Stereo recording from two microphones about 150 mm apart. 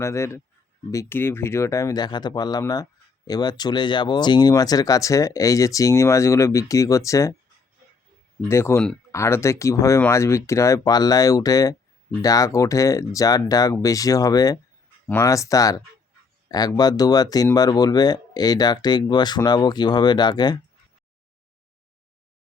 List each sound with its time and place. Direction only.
0.0 s speech: 20° left (ahead or behind)
8.4 s speech: 15° left (ahead or behind)